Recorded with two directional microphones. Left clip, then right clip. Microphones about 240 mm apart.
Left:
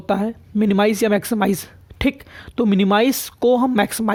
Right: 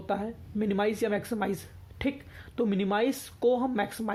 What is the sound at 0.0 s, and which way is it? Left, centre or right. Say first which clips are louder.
Speech: left 10 dB; left.